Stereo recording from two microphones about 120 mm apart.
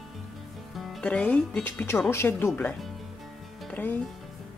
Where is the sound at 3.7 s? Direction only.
15° left (ahead or behind).